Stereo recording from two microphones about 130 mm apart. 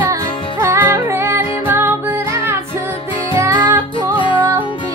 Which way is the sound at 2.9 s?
40° left (ahead or behind).